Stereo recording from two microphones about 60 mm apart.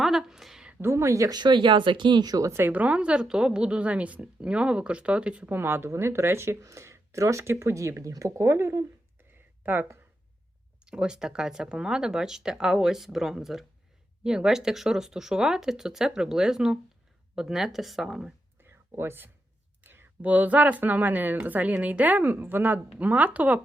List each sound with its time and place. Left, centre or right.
0.0 s a woman's voice: centre
0.9 s speech: right
2.2 s speech: right
2.5 s speech: right
2.7 s a woman's voice: right
5.5 s speech: right
9.6 s speech: right
10.8 s a woman's voice: centre
18.6 s whispering: right
19.8 s a sound: right
20.2 s speech: right